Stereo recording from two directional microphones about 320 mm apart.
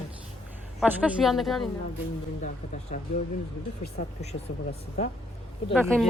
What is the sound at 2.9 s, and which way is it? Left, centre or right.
Speech, left.